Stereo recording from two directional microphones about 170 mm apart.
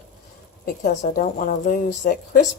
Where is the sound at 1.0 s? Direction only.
50° left (ahead or behind).